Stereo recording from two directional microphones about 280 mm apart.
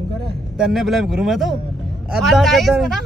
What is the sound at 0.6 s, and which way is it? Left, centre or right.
Speech, centre.